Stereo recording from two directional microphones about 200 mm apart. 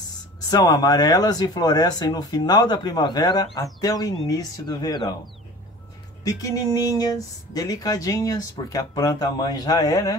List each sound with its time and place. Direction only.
0.5 s speech: 20° left (ahead or behind)